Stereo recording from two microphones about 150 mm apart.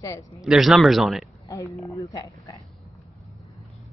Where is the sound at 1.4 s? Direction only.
20° left (ahead or behind).